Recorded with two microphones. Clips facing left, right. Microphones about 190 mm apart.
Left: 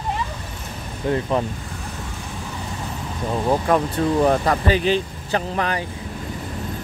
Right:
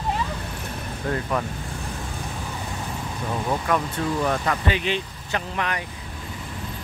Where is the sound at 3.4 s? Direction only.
35° left (ahead or behind).